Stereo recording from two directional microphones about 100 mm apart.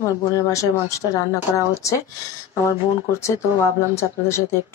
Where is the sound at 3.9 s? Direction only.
30° left (ahead or behind).